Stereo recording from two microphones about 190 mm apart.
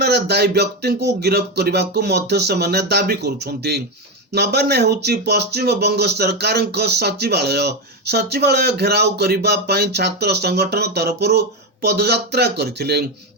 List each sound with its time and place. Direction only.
0.0 s speech: 60° right (ahead or behind)